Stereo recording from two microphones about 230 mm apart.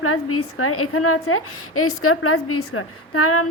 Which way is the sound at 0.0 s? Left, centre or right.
Left.